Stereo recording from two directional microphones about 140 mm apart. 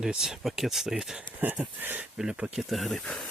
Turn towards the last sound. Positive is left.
turn(degrees=5)  # may be behind; listen again after turning